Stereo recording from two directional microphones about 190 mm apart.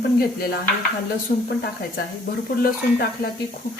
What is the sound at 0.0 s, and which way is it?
Speech, 55° left (ahead or behind).